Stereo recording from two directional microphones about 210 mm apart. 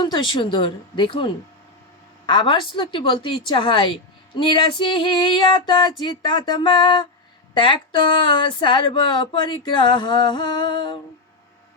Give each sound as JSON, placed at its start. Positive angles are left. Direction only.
{"t": 0.0, "sound": "speech", "side_deg": 20}